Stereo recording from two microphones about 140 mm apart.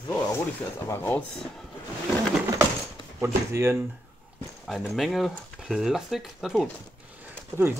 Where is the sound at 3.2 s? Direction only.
20° right (ahead or behind).